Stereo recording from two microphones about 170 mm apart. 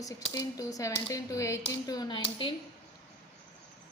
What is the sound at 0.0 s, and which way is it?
Speech, 20° left (ahead or behind).